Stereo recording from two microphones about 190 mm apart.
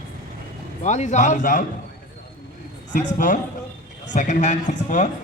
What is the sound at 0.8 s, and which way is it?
Speech, 40° left (ahead or behind).